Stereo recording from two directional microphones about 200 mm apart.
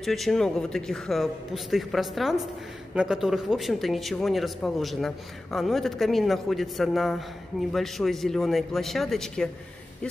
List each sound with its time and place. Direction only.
0.0 s speech: centre (ahead or behind)